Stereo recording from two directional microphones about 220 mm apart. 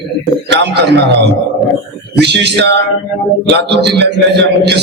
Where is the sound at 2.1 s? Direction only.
50° right (ahead or behind).